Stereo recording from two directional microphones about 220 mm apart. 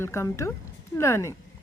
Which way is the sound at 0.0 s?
10° left (ahead or behind).